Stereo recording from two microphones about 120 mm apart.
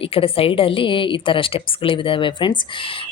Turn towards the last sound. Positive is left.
turn(degrees=45)  # may be behind; listen again after turning